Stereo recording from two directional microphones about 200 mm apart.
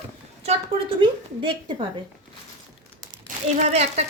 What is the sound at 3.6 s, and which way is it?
Speech, 35° right (ahead or behind).